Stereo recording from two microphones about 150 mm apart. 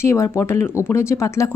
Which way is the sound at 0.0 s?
20° left (ahead or behind).